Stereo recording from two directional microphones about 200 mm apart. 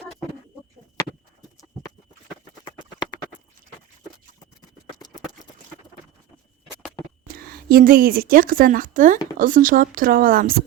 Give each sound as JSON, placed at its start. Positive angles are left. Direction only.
{"t": 4.9, "sound": "clip-clop", "side_deg": 20}
{"t": 7.5, "sound": "speech", "side_deg": -45}